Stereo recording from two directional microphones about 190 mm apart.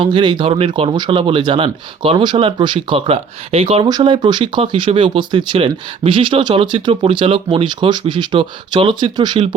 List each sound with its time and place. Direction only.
0.0 s speech: 25° right (ahead or behind)